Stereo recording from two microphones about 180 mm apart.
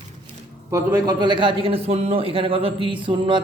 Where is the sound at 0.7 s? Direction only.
20° right (ahead or behind).